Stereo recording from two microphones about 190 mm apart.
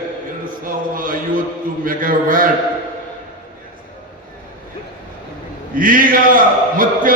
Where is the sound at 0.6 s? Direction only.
45° right (ahead or behind).